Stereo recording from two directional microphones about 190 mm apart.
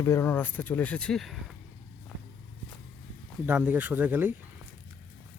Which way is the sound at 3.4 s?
10° right (ahead or behind).